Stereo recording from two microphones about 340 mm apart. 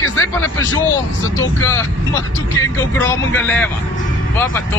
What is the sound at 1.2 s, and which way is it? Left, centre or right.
Speech, centre.